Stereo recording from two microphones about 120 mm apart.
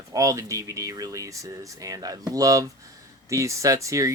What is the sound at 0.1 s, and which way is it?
Speech, 25° right (ahead or behind).